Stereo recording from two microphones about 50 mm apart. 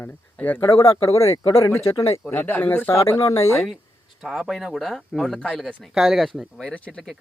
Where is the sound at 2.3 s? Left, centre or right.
Left.